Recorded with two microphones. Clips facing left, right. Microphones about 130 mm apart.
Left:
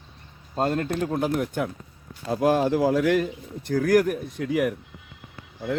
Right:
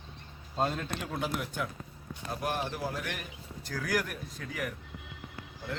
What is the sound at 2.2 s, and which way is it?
Speech, 90° left.